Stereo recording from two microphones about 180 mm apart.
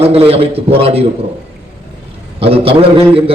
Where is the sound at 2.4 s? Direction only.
30° right (ahead or behind).